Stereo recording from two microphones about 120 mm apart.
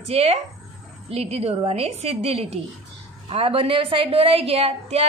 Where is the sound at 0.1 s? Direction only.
55° right (ahead or behind).